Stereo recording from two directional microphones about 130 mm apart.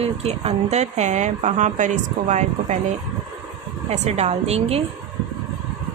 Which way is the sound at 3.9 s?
55° right (ahead or behind).